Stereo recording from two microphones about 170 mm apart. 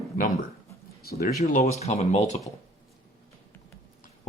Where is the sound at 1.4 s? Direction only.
40° left (ahead or behind).